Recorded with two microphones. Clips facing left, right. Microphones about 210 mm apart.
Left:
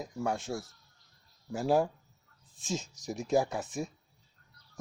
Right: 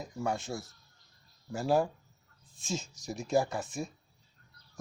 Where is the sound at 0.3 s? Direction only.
15° left (ahead or behind).